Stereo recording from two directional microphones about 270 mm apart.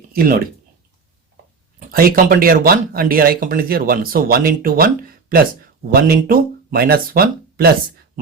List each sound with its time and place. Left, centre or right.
0.1 s speech: right
1.9 s speech: right
5.9 s speech: right